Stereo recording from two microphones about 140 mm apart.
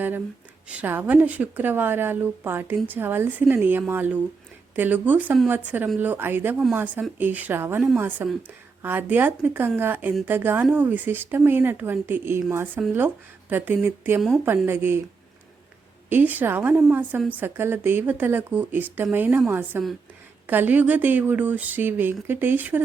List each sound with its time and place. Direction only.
0.7 s a woman's voice: 10° right (ahead or behind)
16.0 s a woman's voice: 10° right (ahead or behind)